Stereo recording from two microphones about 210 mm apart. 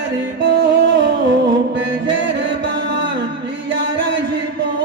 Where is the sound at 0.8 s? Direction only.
60° right (ahead or behind).